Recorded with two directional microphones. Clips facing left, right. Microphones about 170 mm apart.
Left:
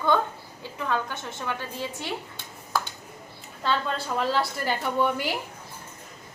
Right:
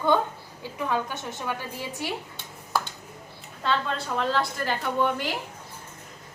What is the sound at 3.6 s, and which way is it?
A woman's voice, centre (ahead or behind).